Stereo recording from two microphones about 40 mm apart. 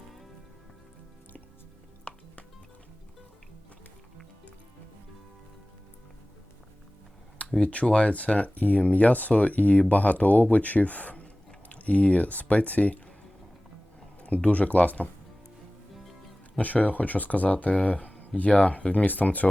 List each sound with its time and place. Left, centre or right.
2.1 s music: left
7.6 s speech: left
14.2 s speech: left
16.6 s speech: left